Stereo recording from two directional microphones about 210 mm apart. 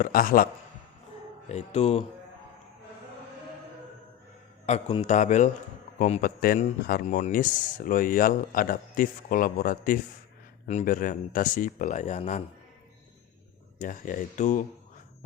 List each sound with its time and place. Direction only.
0.0 s a man's voice: 40° left (ahead or behind)
1.5 s speech: 30° left (ahead or behind)
4.6 s speech: 30° left (ahead or behind)
13.7 s speech: 40° left (ahead or behind)